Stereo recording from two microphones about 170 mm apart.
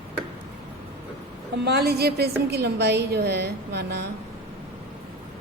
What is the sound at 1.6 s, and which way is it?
A woman's voice, 70° right (ahead or behind).